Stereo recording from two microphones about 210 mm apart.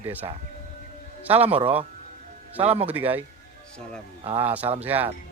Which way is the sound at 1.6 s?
25° right (ahead or behind).